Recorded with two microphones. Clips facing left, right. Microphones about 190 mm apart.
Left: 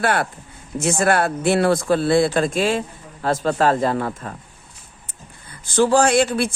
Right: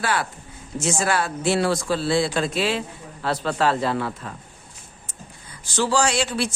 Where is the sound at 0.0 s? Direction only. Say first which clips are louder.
Left 4 dB; 55° left (ahead or behind).